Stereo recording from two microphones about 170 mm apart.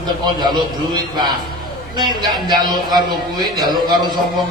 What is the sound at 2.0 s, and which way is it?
A man's voice, 25° right (ahead or behind).